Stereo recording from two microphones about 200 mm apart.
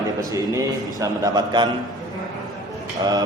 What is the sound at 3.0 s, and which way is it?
Speech, 20° right (ahead or behind).